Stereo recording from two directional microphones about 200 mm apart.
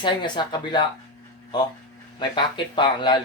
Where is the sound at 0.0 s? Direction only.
20° left (ahead or behind).